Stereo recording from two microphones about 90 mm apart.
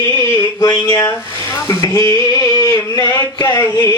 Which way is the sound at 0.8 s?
40° left (ahead or behind).